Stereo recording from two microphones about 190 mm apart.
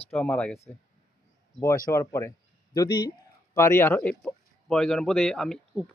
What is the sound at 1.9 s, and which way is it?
A man's voice, 15° left (ahead or behind).